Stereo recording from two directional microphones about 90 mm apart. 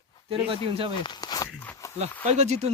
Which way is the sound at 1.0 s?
55° left (ahead or behind).